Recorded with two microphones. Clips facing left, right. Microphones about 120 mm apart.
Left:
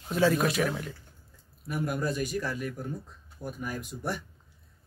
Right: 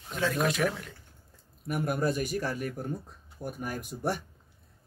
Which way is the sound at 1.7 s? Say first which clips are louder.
Right 2 dB; 50° right (ahead or behind).